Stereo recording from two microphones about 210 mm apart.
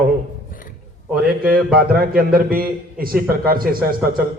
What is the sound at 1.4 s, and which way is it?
A man's voice, 45° right (ahead or behind).